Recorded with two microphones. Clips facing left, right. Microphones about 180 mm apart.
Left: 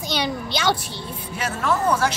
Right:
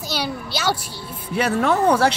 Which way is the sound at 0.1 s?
5° right (ahead or behind).